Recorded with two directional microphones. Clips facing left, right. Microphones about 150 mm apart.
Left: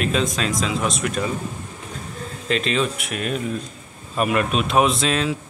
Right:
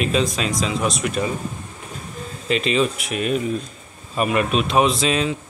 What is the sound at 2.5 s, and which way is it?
Speech, 5° right (ahead or behind).